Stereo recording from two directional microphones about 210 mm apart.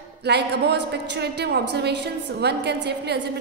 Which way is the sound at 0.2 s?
50° right (ahead or behind).